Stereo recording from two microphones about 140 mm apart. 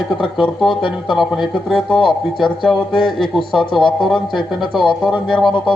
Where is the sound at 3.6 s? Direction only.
35° left (ahead or behind).